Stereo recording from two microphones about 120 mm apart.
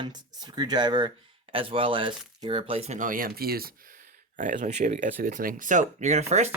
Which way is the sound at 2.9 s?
90° right.